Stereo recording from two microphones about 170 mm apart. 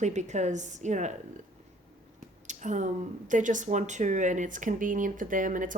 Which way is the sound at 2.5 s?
45° right (ahead or behind).